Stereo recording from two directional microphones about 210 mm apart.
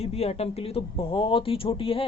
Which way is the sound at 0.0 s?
30° left (ahead or behind).